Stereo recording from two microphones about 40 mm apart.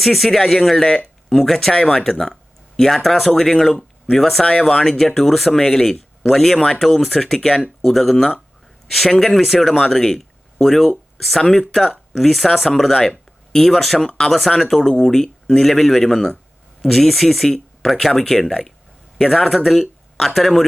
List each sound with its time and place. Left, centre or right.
0.0 s speech: centre
3.3 s speech: centre
6.6 s speech: centre
9.9 s speech: centre
10.2 s speech: centre
14.3 s speech: centre
19.5 s speech: centre